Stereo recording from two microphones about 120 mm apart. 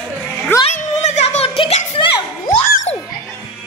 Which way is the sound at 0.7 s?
70° left (ahead or behind).